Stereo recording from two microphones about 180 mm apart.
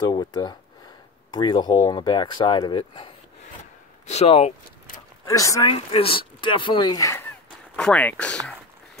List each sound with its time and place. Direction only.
0.0 s speech: 25° left (ahead or behind)
4.0 s speech: 40° left (ahead or behind)
5.2 s speech: 20° left (ahead or behind)
7.7 s speech: 5° left (ahead or behind)